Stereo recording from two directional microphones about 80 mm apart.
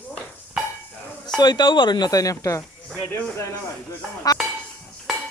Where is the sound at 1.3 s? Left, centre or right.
Left.